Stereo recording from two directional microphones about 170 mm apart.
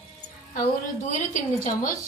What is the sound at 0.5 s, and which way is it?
A woman's voice, 50° left (ahead or behind).